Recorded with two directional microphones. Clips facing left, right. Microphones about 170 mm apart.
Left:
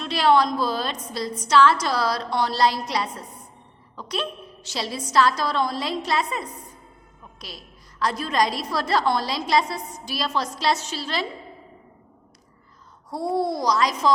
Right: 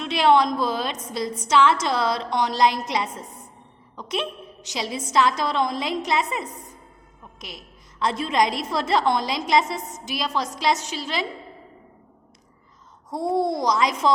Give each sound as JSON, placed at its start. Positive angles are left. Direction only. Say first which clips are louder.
{"t": 0.0, "sound": "a woman's voice", "louder": "right 1 dB", "side_deg": -20}
{"t": 7.3, "sound": "a woman's voice", "louder": "right 1 dB", "side_deg": -20}
{"t": 13.1, "sound": "a woman's voice", "louder": "right 1 dB", "side_deg": -20}